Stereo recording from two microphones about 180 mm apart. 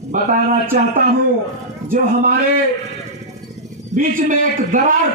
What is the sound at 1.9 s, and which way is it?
Speech, 55° right (ahead or behind).